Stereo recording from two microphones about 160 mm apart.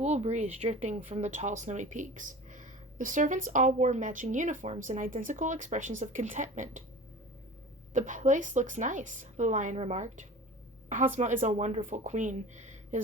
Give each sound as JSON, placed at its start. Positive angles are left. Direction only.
{"t": 0.0, "sound": "speech", "side_deg": -40}
{"t": 7.9, "sound": "speech", "side_deg": -50}